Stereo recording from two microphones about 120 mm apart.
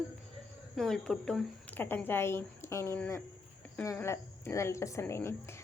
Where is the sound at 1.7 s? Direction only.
15° left (ahead or behind).